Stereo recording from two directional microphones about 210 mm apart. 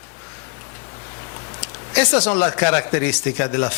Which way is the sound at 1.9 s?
10° left (ahead or behind).